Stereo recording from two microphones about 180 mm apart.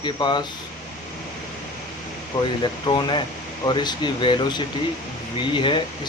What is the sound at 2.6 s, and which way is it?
A man's voice, 25° left (ahead or behind).